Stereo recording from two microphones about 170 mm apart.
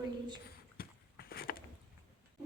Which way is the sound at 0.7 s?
60° left (ahead or behind).